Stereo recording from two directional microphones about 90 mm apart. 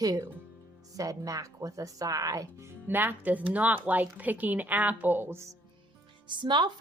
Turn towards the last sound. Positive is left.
turn(degrees=-55)  # may be behind; listen again after turning